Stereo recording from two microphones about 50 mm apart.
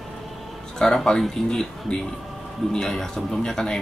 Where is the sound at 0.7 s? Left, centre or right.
Centre.